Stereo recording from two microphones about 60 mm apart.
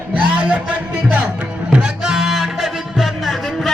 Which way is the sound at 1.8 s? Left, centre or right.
Centre.